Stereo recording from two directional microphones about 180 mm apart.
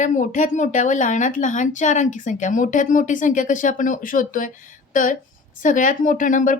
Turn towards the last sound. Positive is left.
turn(degrees=45)  # may be behind; listen again after turning